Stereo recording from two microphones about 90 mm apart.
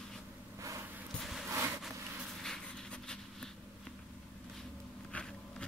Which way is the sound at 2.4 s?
5° left (ahead or behind).